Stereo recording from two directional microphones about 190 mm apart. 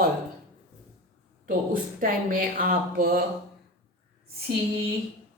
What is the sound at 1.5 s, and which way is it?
Speech, 45° right (ahead or behind).